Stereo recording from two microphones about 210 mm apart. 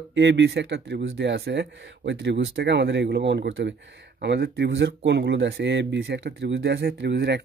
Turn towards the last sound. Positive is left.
turn(degrees=-55)  # may be behind; listen again after turning